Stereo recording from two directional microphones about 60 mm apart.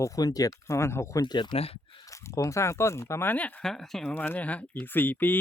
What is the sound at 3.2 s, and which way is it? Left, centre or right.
Speech, left.